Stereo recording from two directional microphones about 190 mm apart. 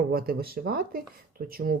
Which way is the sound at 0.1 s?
50° right (ahead or behind).